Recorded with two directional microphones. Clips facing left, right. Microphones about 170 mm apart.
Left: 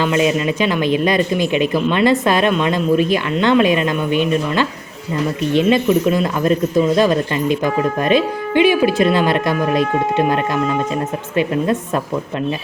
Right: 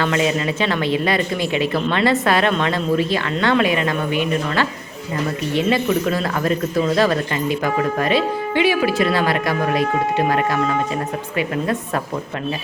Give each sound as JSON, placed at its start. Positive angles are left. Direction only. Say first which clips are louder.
{"t": 0.0, "sound": "speech", "louder": "left 3 dB", "side_deg": 20}